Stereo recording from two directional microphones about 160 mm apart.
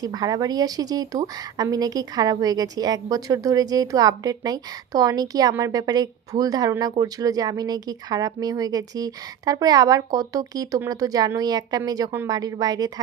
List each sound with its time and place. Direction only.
0.0 s speech: 25° right (ahead or behind)